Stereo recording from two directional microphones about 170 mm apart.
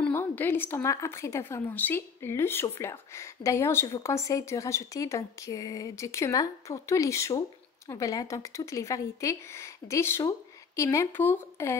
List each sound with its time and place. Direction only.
0.0 s speech: 15° left (ahead or behind)